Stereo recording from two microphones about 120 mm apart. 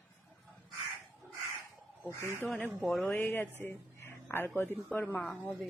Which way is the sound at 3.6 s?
20° left (ahead or behind).